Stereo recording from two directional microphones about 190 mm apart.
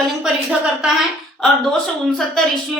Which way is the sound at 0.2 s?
5° right (ahead or behind).